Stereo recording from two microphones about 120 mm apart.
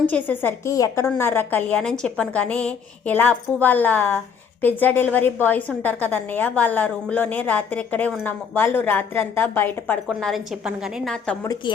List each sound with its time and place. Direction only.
0.0 s a woman's voice: 15° left (ahead or behind)
0.7 s a woman's voice: 30° left (ahead or behind)
1.2 s a woman's voice: 20° left (ahead or behind)
10.1 s a woman's voice: 5° left (ahead or behind)